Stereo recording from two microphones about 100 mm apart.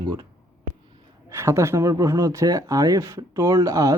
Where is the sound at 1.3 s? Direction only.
30° right (ahead or behind).